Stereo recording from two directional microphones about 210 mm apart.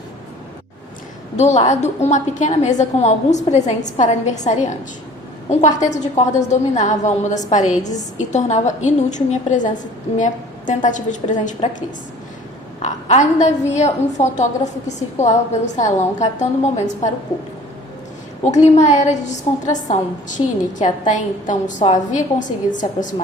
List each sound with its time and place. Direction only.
1.4 s a woman's voice: 35° left (ahead or behind)
5.5 s a woman's voice: 35° left (ahead or behind)
12.8 s a woman's voice: 35° left (ahead or behind)
18.6 s a woman's voice: 35° left (ahead or behind)